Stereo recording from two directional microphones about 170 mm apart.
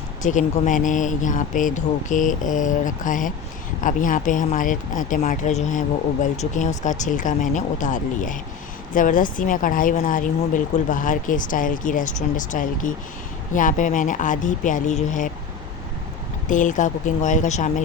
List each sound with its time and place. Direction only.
0.2 s speech: 45° left (ahead or behind)
16.5 s speech: 50° left (ahead or behind)